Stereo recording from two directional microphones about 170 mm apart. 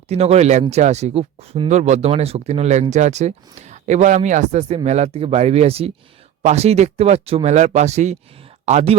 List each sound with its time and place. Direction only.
0.1 s speech: 40° right (ahead or behind)